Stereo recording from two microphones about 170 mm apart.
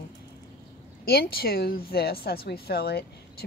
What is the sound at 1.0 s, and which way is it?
A woman's voice, 65° left (ahead or behind).